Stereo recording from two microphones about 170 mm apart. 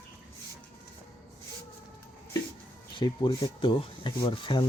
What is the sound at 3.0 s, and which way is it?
Speech, 25° left (ahead or behind).